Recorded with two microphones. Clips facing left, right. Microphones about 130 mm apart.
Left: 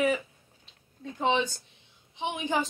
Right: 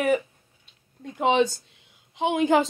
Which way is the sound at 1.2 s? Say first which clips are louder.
Right 6 dB; 70° right (ahead or behind).